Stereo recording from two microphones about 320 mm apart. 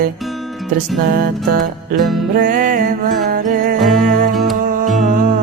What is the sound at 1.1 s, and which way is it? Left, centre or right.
Music, right.